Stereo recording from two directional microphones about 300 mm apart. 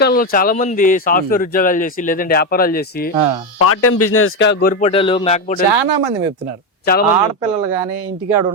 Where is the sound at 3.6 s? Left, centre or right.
Left.